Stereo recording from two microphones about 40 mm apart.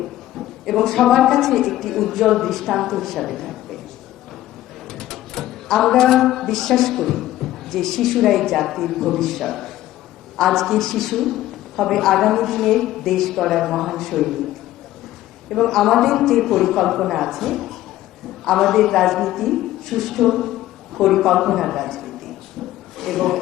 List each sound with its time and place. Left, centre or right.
0.6 s a woman's voice: centre
4.9 s a man's voice: centre
15.4 s a woman's voice: centre